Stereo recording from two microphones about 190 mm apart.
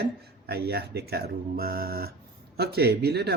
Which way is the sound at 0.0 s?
55° right (ahead or behind).